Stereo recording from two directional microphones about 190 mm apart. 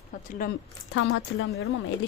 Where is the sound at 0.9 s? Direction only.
80° left.